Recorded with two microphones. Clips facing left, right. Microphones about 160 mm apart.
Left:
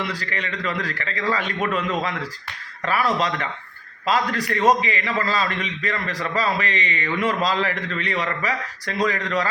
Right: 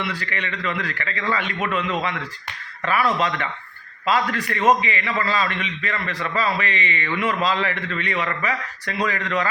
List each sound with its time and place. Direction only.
0.0 s a man's voice: 40° left (ahead or behind)